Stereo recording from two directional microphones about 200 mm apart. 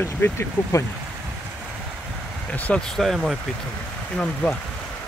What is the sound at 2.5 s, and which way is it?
Speech, 5° left (ahead or behind).